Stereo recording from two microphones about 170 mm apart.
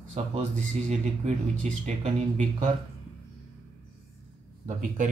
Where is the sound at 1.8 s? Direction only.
45° right (ahead or behind).